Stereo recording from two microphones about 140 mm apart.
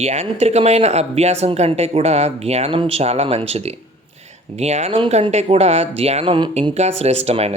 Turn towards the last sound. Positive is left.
turn(degrees=-50)  # may be behind; listen again after turning